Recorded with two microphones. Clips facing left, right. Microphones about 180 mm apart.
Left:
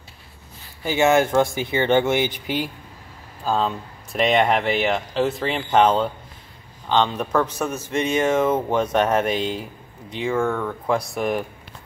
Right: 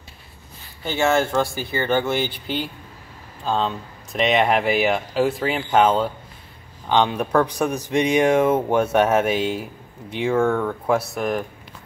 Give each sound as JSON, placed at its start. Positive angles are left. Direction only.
{"t": 0.8, "sound": "speech", "side_deg": 15}